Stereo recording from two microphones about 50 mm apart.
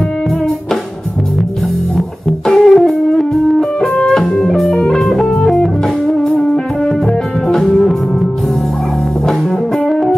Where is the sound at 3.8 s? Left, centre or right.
Centre.